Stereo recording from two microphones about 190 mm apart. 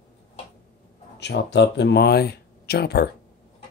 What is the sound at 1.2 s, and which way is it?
Speech, 65° left (ahead or behind).